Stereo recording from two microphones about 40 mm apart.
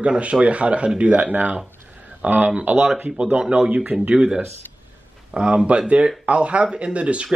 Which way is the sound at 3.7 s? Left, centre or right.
Right.